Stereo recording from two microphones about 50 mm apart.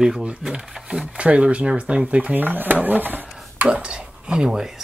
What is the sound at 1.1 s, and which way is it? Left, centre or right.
Speech, right.